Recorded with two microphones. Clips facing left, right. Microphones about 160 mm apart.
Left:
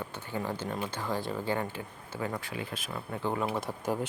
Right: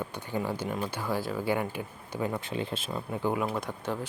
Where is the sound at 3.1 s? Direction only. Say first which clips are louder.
Right 3 dB; 10° right (ahead or behind).